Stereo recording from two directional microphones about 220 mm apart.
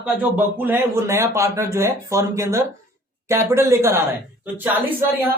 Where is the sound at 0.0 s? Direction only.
10° right (ahead or behind).